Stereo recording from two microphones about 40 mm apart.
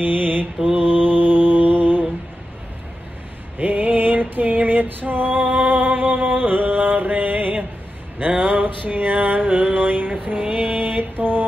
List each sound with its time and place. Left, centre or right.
0.0 s mantra: right
3.5 s a sound: right
8.3 s music: right
10.4 s mantra: right
10.8 s mantra: right